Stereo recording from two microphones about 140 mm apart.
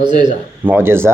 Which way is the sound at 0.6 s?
15° right (ahead or behind).